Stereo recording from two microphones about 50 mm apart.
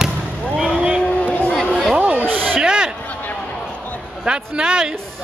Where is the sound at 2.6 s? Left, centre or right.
Centre.